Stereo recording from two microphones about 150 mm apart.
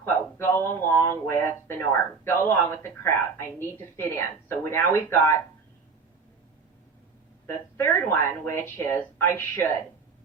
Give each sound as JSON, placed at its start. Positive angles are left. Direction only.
{"t": 0.0, "sound": "speech", "side_deg": 15}
{"t": 7.4, "sound": "speech", "side_deg": 15}